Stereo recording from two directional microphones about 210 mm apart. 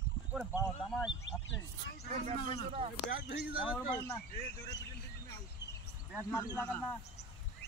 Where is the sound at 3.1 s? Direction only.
45° left (ahead or behind).